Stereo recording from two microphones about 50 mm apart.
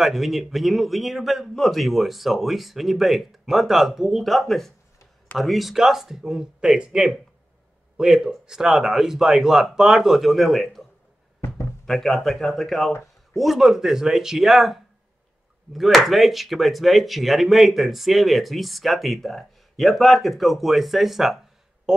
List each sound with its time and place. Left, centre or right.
0.0 s speech: centre
11.8 s speech: centre
21.9 s speech: centre